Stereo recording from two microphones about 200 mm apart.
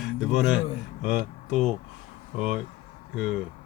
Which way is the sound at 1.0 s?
40° right (ahead or behind).